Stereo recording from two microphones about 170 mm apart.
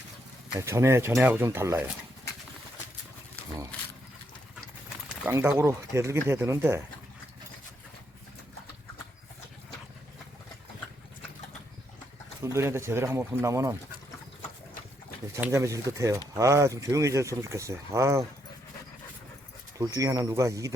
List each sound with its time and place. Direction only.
0.6 s speech: 15° right (ahead or behind)
5.2 s speech: 10° right (ahead or behind)
12.4 s speech: 15° right (ahead or behind)
15.3 s speech: 15° right (ahead or behind)
19.8 s speech: 20° right (ahead or behind)